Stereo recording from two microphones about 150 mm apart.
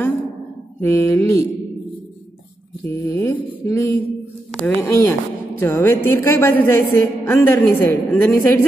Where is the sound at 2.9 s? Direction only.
15° left (ahead or behind).